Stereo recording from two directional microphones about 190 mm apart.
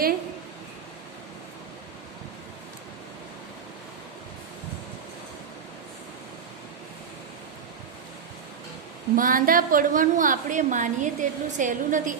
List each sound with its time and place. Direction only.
9.1 s a woman's voice: 45° right (ahead or behind)